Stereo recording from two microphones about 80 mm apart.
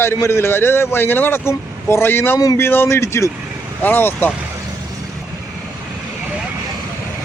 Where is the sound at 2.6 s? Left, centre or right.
Left.